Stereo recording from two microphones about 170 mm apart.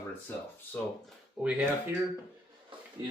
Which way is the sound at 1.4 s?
5° right (ahead or behind).